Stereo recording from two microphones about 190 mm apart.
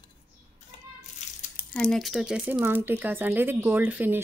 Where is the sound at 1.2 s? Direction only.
40° left (ahead or behind).